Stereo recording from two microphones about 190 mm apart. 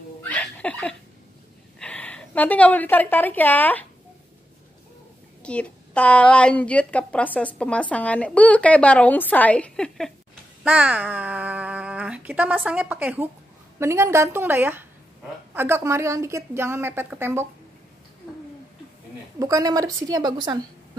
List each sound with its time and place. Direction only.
0.2 s laughter: 5° left (ahead or behind)
1.8 s a woman's voice: 5° left (ahead or behind)
5.4 s a woman's voice: 5° left (ahead or behind); by 17.5 s 10° right (ahead or behind)
19.4 s a woman's voice: 20° right (ahead or behind)